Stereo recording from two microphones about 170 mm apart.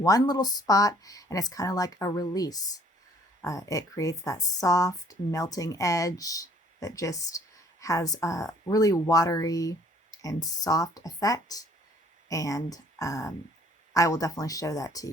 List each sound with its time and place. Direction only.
0.0 s speech: 20° left (ahead or behind)